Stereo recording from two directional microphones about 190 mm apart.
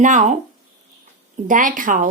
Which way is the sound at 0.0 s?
40° right (ahead or behind).